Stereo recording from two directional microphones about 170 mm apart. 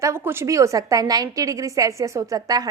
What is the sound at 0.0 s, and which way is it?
A woman's voice, 15° right (ahead or behind).